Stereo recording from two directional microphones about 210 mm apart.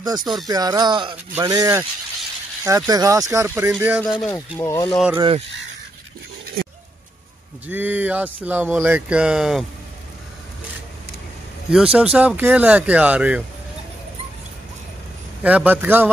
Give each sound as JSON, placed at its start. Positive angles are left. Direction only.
{"t": 0.0, "sound": "speech", "side_deg": -20}
{"t": 4.6, "sound": "speech", "side_deg": 15}
{"t": 4.8, "sound": "speech", "side_deg": 0}
{"t": 7.6, "sound": "speech", "side_deg": -10}
{"t": 11.7, "sound": "speech", "side_deg": -5}
{"t": 15.4, "sound": "speech", "side_deg": -5}